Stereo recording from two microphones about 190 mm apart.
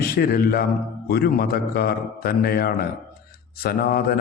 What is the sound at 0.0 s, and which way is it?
A man's voice, 55° left (ahead or behind).